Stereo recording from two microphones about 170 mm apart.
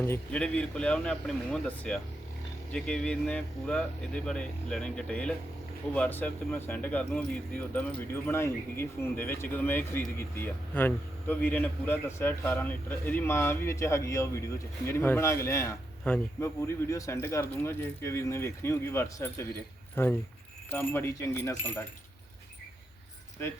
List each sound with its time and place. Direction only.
0.0 s speech: 10° left (ahead or behind)